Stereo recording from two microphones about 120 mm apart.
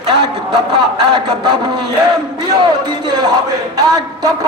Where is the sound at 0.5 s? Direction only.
40° right (ahead or behind).